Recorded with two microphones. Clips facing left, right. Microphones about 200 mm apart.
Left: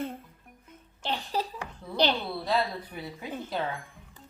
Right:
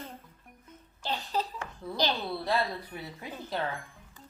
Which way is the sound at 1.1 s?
15° left (ahead or behind).